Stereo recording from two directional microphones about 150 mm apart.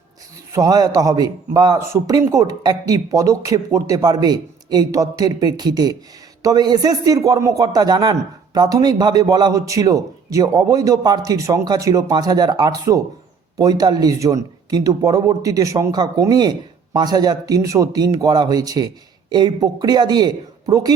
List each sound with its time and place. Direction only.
0.5 s speech: 25° right (ahead or behind)